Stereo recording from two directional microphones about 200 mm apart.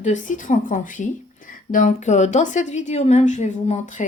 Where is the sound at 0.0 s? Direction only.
40° left (ahead or behind).